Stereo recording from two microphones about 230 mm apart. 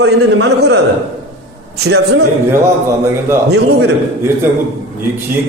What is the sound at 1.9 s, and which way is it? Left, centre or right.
Speech, right.